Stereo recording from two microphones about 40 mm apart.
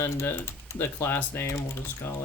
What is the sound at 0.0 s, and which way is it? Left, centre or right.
Speech, left.